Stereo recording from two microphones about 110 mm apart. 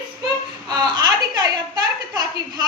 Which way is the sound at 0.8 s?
40° right (ahead or behind).